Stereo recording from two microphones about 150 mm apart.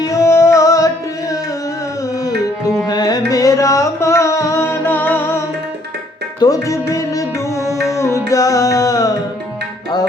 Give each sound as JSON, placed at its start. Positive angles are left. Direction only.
{"t": 0.0, "sound": "music", "side_deg": 20}
{"t": 2.1, "sound": "tabla", "side_deg": 25}
{"t": 2.8, "sound": "carnatic music", "side_deg": 25}
{"t": 6.4, "sound": "music", "side_deg": 20}